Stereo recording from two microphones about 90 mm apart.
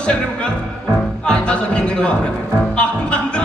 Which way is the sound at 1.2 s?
10° left (ahead or behind).